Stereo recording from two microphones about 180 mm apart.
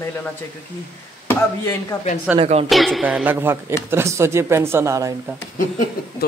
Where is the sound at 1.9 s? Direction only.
20° left (ahead or behind).